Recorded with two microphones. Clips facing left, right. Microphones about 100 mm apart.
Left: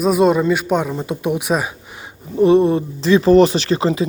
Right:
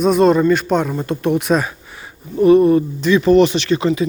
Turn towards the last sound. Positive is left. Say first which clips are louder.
# right 1 dB
turn(degrees=30)  # may be behind; listen again after turning